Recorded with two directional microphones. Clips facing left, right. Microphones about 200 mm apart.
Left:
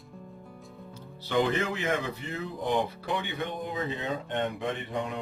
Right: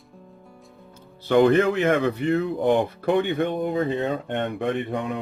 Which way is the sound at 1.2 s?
55° right (ahead or behind).